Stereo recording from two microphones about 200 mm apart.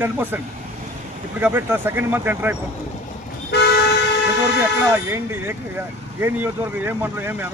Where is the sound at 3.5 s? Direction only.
55° left (ahead or behind).